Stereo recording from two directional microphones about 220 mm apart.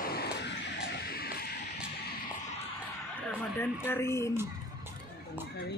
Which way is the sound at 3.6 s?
10° left (ahead or behind).